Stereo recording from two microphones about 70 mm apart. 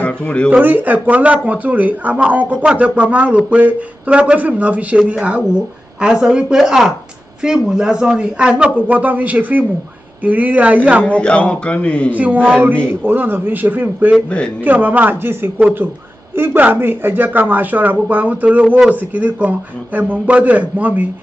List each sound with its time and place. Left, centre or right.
0.0 s speech: centre
0.5 s speech: right
11.1 s a man's voice: centre
12.1 s speech: right